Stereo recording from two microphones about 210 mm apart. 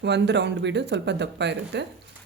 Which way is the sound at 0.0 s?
55° right (ahead or behind).